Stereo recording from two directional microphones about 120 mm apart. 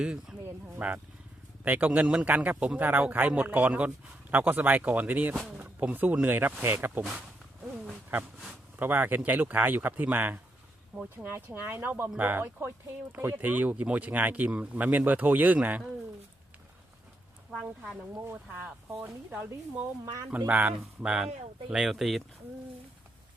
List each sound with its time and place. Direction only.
0.0 s a man's voice: 10° right (ahead or behind)
5.3 s a man's voice: centre (ahead or behind)
18.2 s a man's voice: 20° right (ahead or behind)
20.5 s a man's voice: 15° right (ahead or behind)